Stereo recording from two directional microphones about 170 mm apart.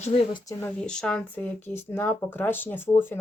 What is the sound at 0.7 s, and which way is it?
Speech, 5° left (ahead or behind).